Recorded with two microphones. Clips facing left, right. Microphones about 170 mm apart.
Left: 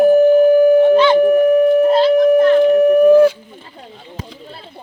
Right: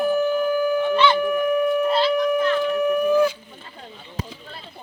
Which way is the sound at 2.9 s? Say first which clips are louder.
Left 9 dB; 70° left (ahead or behind).